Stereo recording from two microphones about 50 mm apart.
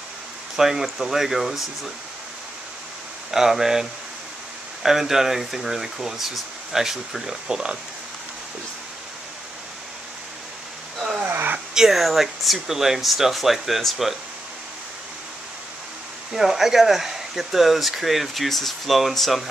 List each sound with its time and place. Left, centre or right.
0.6 s speech: centre
3.3 s speech: centre
4.8 s speech: centre
11.2 s a sound: right
11.7 s speech: centre
16.3 s speech: centre